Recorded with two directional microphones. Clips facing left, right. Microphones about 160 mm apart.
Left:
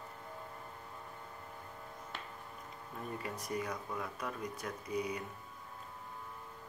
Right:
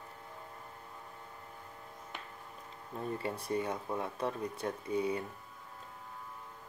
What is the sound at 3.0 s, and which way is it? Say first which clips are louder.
Speech: right 5 dB; 30° right (ahead or behind).